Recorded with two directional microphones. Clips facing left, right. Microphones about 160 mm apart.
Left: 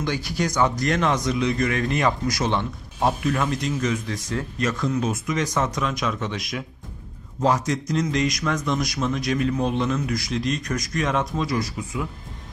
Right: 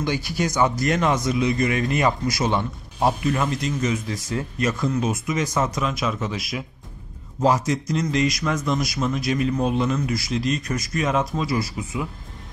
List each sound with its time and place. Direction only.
0.0 s a man's voice: 10° right (ahead or behind)